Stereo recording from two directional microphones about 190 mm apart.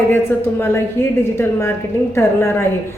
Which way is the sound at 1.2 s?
15° left (ahead or behind).